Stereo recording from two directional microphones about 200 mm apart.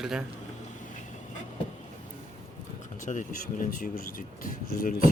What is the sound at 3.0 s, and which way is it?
Speech, 40° left (ahead or behind).